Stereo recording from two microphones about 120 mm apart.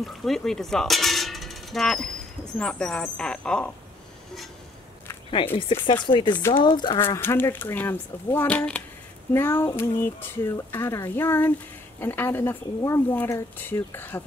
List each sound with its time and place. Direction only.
0.0 s speech: 5° left (ahead or behind)
5.6 s chopping: 45° left (ahead or behind)
6.0 s speech: 40° left (ahead or behind)
7.0 s speech: 20° left (ahead or behind)